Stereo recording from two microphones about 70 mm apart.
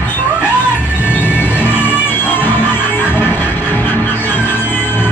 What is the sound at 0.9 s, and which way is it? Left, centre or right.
Music, left.